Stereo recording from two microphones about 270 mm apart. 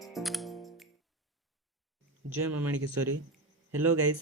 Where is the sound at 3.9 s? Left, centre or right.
Right.